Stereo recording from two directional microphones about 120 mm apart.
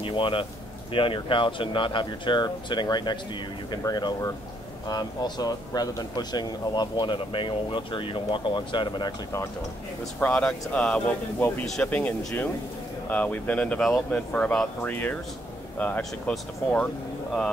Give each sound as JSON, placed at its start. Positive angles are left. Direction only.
{"t": 0.0, "sound": "speech", "side_deg": 45}
{"t": 10.2, "sound": "speech", "side_deg": 10}
{"t": 11.6, "sound": "speech", "side_deg": 5}
{"t": 13.1, "sound": "speech", "side_deg": 15}